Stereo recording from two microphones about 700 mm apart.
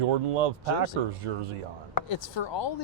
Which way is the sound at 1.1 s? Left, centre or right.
Right.